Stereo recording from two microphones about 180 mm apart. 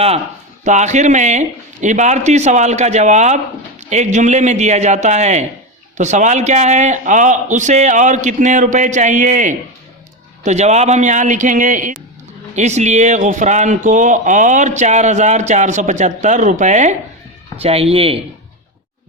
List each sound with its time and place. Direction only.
0.6 s a man's voice: 40° right (ahead or behind)